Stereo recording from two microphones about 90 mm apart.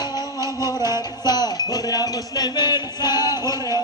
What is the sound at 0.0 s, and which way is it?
Music, 50° left (ahead or behind).